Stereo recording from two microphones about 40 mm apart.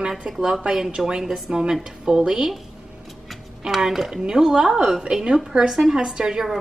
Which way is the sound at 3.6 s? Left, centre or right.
Centre.